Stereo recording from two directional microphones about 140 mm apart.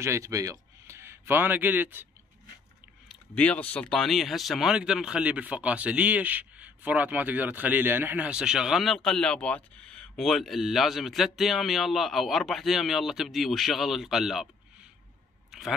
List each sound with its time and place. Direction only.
0.0 s speech: 20° right (ahead or behind)
3.3 s speech: 10° left (ahead or behind)